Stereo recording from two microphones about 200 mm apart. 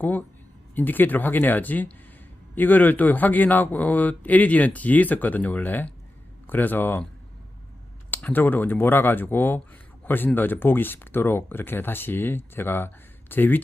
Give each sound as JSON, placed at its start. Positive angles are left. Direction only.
{"t": 0.0, "sound": "speech", "side_deg": 10}
{"t": 8.1, "sound": "speech", "side_deg": 10}